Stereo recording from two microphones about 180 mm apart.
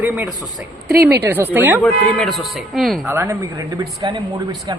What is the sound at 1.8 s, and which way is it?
A man's voice, 5° left (ahead or behind).